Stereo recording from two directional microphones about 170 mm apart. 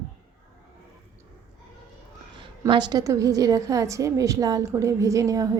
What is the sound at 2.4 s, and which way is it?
A woman's voice, 30° right (ahead or behind).